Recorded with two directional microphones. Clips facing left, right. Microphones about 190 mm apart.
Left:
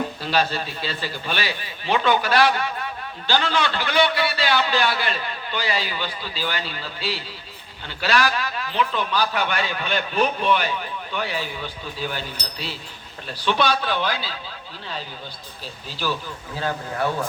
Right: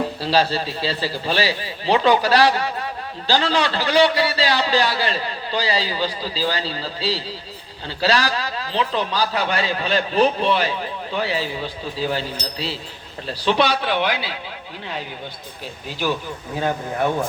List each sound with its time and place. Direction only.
0.2 s a man's voice: 35° right (ahead or behind)
13.2 s a man's voice: 35° right (ahead or behind)
14.0 s speech: 15° right (ahead or behind)
16.6 s speech: 20° right (ahead or behind)